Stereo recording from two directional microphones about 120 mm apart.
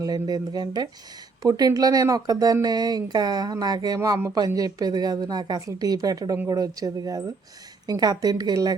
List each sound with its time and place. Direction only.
0.0 s speech: 30° right (ahead or behind)